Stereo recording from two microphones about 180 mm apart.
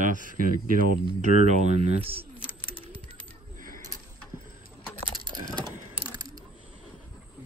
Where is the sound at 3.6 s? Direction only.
50° right (ahead or behind).